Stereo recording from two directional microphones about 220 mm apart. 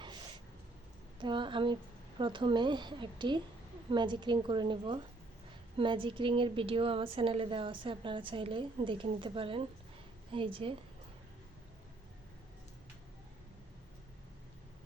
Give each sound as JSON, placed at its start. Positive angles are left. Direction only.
{"t": 1.2, "sound": "a woman's voice", "side_deg": -20}